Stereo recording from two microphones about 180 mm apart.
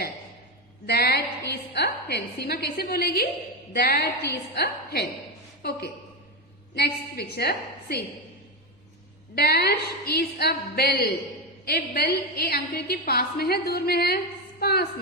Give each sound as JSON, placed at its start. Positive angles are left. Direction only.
{"t": 0.9, "sound": "a sound", "side_deg": 60}
{"t": 1.5, "sound": "a woman's voice", "side_deg": 65}
{"t": 6.7, "sound": "a woman's voice", "side_deg": 65}
{"t": 9.3, "sound": "a woman's voice", "side_deg": 60}